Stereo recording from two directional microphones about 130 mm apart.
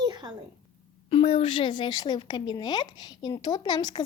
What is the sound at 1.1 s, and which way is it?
Speech, 50° left (ahead or behind).